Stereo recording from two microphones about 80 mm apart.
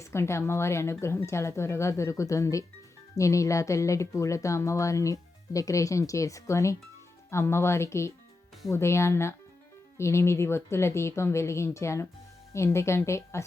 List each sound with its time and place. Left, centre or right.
0.0 s speech: left